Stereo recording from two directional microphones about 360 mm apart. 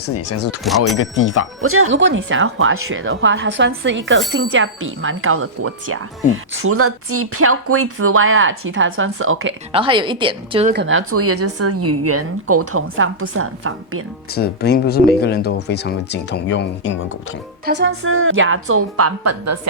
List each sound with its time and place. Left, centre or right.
0.0 s speech: left
1.6 s speech: right
9.7 s a woman's voice: centre
10.8 s speech: right
14.3 s speech: left
17.7 s speech: right